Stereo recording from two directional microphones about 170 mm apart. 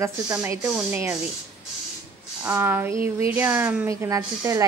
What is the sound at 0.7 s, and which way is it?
Speech, 5° right (ahead or behind).